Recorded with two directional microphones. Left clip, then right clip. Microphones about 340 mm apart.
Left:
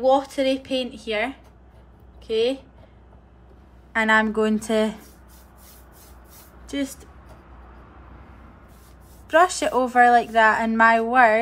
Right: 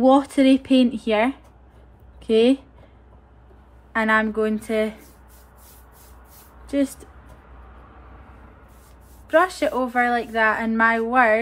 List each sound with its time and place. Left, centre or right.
0.0 s speech: centre
3.9 s speech: centre
6.6 s a sound: centre
9.3 s speech: centre